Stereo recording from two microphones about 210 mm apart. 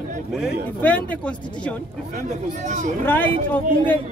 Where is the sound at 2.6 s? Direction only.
35° right (ahead or behind).